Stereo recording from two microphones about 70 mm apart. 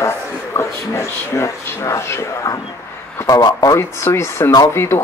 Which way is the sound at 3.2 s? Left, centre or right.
Left.